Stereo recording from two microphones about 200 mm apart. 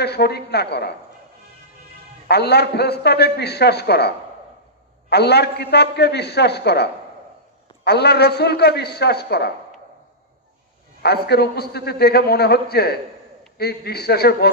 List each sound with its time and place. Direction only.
0.0 s a man's voice: 55° left (ahead or behind)
2.2 s a man's voice: 55° left (ahead or behind)
5.1 s a man's voice: 55° left (ahead or behind)
11.0 s a man's voice: 55° left (ahead or behind)